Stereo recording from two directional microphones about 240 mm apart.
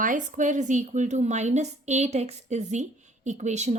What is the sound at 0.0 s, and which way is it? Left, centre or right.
Speech, right.